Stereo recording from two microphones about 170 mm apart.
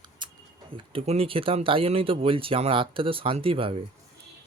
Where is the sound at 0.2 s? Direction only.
25° right (ahead or behind).